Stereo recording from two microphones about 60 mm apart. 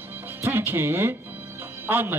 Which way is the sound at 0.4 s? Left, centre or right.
Right.